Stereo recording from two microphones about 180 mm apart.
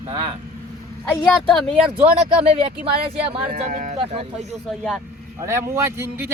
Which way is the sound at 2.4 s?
30° right (ahead or behind).